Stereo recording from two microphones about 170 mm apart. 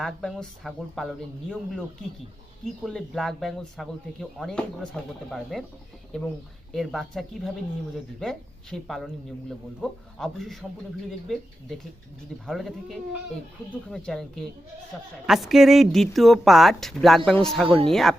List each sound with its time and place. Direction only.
0.0 s speech: centre (ahead or behind)
6.7 s speech: centre (ahead or behind)
12.5 s speech: centre (ahead or behind)
17.7 s speech: 35° right (ahead or behind)